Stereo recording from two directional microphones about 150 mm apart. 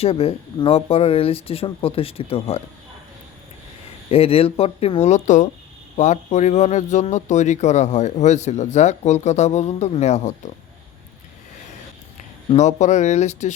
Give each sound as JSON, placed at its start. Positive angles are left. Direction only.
{"t": 0.0, "sound": "speech", "side_deg": 40}
{"t": 4.1, "sound": "speech", "side_deg": 40}
{"t": 12.5, "sound": "speech", "side_deg": 50}